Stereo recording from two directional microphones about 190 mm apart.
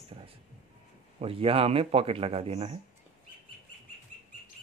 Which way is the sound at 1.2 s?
30° right (ahead or behind).